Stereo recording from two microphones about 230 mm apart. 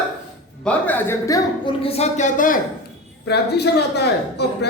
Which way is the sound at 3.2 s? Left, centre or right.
Left.